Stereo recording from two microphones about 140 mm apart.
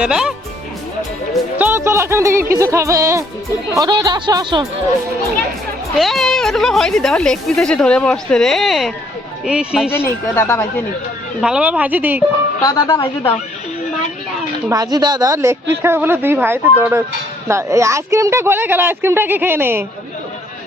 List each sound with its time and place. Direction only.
0.0 s speech: 5° right (ahead or behind)
1.5 s a woman's voice: 15° right (ahead or behind); by 4.6 s 30° right (ahead or behind)
6.0 s a woman's voice: centre (ahead or behind)
9.9 s speech: 15° left (ahead or behind)
11.3 s speech: 5° right (ahead or behind)
12.6 s a woman's voice: 25° left (ahead or behind)
14.7 s a woman's voice: 30° right (ahead or behind)